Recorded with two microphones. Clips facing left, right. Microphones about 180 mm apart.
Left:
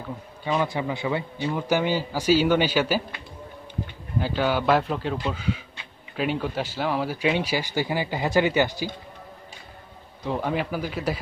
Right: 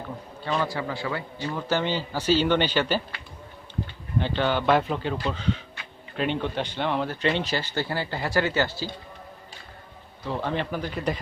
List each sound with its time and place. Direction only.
0.4 s speech: 15° left (ahead or behind)
4.2 s a man's voice: 5° left (ahead or behind)
10.2 s speech: 10° left (ahead or behind)